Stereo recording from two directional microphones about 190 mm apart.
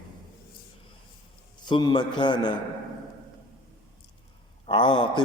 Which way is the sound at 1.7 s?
20° left (ahead or behind).